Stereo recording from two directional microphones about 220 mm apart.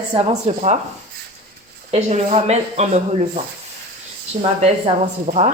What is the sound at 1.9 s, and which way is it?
Speech, 30° right (ahead or behind).